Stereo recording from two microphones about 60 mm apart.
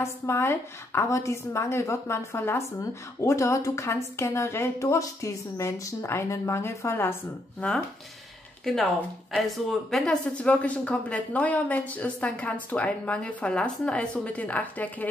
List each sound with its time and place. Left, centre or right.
0.0 s a woman's voice: left
3.2 s a woman's voice: left
4.9 s a woman's voice: left
6.3 s a woman's voice: left
7.6 s a woman's voice: left
8.6 s speech: centre
10.0 s a woman's voice: left